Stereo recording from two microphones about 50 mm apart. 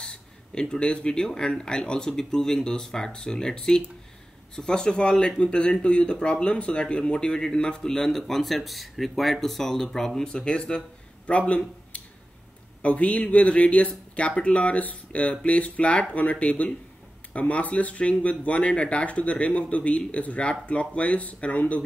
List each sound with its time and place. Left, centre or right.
0.0 s a man's voice: centre